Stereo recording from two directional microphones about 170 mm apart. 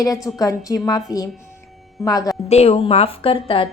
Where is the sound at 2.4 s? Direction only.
40° left (ahead or behind).